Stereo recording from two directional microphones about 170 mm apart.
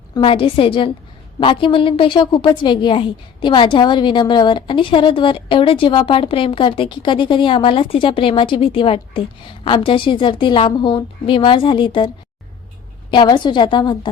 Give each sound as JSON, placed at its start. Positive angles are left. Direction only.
{"t": 0.1, "sound": "a woman's voice", "side_deg": 30}